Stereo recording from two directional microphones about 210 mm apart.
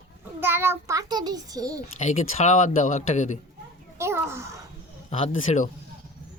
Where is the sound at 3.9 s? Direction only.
10° right (ahead or behind).